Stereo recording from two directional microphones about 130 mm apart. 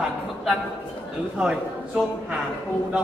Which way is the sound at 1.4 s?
5° right (ahead or behind).